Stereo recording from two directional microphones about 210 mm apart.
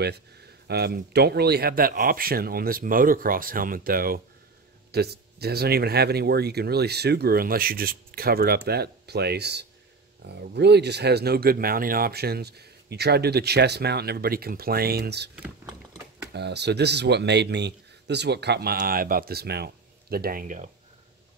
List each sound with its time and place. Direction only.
0.7 s speech: 50° right (ahead or behind)
15.3 s speech: 5° right (ahead or behind)
16.3 s speech: 55° right (ahead or behind); by 20.7 s 35° right (ahead or behind)